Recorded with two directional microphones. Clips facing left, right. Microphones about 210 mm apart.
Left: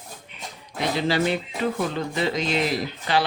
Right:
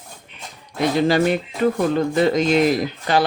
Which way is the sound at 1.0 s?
50° right (ahead or behind).